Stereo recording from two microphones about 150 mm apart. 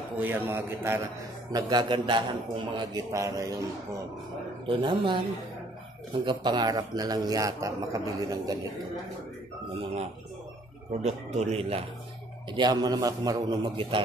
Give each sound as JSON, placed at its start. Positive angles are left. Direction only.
{"t": 0.1, "sound": "a man's voice", "side_deg": -15}
{"t": 1.5, "sound": "a man's voice", "side_deg": -30}
{"t": 3.1, "sound": "a man's voice", "side_deg": -20}
{"t": 4.6, "sound": "a man's voice", "side_deg": -35}
{"t": 6.2, "sound": "a man's voice", "side_deg": -30}
{"t": 11.3, "sound": "a man's voice", "side_deg": -40}
{"t": 12.4, "sound": "a man's voice", "side_deg": -30}